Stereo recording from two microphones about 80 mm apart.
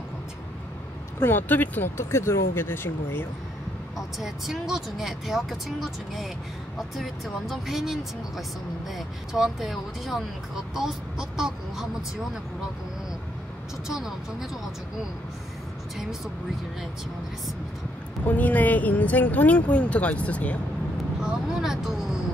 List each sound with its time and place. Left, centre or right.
1.2 s speech: left
2.0 s speech: left
4.2 s speech: centre
13.8 s speech: centre
18.2 s speech: left
21.2 s speech: centre